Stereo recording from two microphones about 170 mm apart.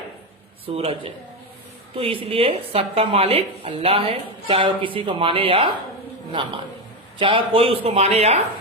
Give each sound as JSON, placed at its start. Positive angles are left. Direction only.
{"t": 0.6, "sound": "speech", "side_deg": -35}
{"t": 7.2, "sound": "speech", "side_deg": -30}